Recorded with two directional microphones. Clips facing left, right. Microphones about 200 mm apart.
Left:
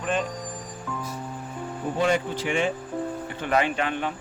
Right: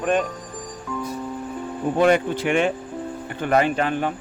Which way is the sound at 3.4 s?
45° right (ahead or behind).